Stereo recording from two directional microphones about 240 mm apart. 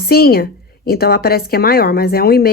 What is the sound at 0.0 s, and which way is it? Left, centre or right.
A woman's voice, left.